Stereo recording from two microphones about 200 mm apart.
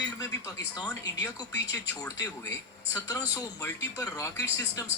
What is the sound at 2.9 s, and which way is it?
Speech, 15° left (ahead or behind).